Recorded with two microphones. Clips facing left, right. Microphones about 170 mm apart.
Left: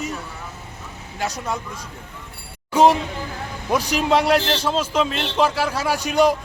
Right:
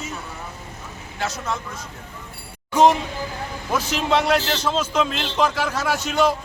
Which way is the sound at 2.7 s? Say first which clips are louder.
Left 1 dB; 10° left (ahead or behind).